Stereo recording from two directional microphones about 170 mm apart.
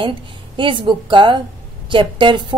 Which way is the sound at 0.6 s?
30° right (ahead or behind).